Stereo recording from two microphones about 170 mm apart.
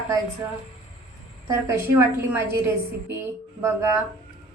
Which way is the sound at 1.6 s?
15° right (ahead or behind).